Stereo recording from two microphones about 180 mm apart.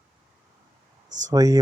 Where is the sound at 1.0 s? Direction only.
45° right (ahead or behind).